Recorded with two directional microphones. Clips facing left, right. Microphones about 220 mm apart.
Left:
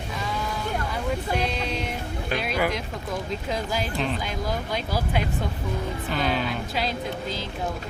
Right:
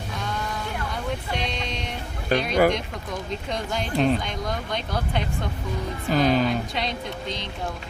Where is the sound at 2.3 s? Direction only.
40° right (ahead or behind).